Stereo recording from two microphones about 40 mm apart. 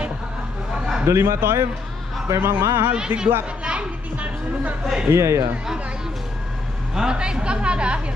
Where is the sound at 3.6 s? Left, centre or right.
Right.